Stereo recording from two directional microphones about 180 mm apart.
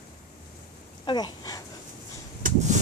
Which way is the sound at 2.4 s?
45° right (ahead or behind).